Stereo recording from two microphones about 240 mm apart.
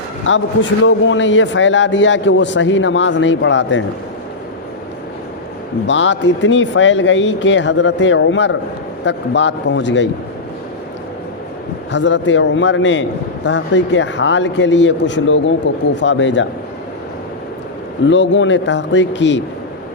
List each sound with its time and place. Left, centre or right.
0.3 s a man's voice: left
5.8 s a man's voice: left
11.9 s a man's voice: left
18.1 s a man's voice: left